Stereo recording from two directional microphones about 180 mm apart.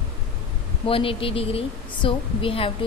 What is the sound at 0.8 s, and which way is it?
A woman's voice, 30° left (ahead or behind).